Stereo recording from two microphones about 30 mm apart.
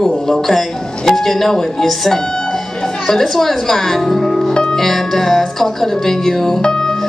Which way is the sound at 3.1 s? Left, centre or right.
Centre.